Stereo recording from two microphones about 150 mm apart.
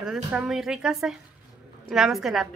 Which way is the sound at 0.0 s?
5° right (ahead or behind).